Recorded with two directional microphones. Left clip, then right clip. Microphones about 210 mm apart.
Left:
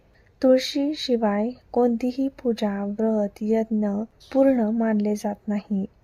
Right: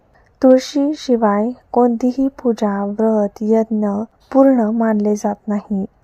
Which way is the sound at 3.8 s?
Centre (ahead or behind).